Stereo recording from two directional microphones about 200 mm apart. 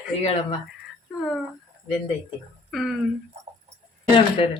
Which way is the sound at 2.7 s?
Centre (ahead or behind).